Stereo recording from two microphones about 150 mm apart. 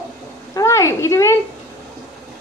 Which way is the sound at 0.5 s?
20° left (ahead or behind).